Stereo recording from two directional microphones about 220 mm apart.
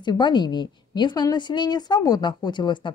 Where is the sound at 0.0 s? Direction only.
20° left (ahead or behind).